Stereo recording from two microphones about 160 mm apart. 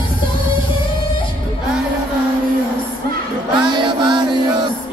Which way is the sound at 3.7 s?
30° right (ahead or behind).